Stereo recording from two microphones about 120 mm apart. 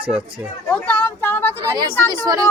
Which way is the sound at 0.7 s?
10° left (ahead or behind).